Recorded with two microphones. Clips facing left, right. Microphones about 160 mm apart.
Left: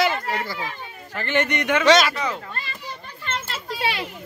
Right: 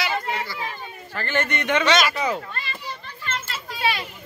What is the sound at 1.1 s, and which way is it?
Speech, 15° left (ahead or behind).